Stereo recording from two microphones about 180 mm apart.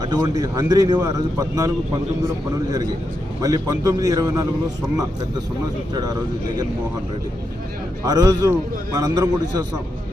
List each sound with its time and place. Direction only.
0.0 s a man's voice: 20° right (ahead or behind)
3.4 s a man's voice: 20° right (ahead or behind)
5.9 s a man's voice: 20° right (ahead or behind)
8.0 s a man's voice: 20° right (ahead or behind)